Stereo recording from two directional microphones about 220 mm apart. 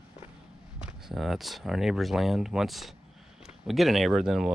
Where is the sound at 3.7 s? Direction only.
Centre (ahead or behind).